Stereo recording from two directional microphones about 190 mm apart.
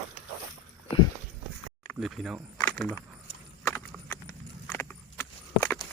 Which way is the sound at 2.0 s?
Centre (ahead or behind).